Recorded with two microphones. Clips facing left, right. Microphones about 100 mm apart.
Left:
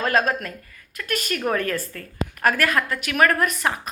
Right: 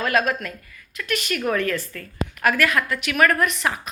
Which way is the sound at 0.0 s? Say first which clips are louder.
Even; 40° left (ahead or behind).